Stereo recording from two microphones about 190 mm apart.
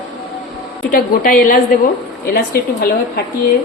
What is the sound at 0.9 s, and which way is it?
A woman's voice, 50° left (ahead or behind).